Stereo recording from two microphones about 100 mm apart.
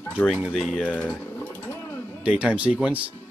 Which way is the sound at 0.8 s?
15° left (ahead or behind).